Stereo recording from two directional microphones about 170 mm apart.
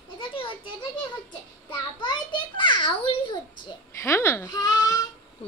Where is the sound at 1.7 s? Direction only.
25° left (ahead or behind).